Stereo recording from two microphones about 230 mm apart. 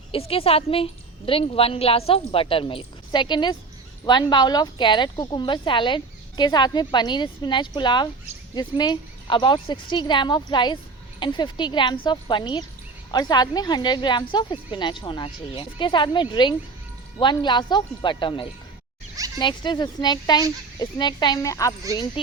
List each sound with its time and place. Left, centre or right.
0.1 s a woman's voice: left